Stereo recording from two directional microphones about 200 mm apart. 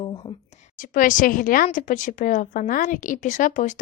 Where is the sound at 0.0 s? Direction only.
25° left (ahead or behind).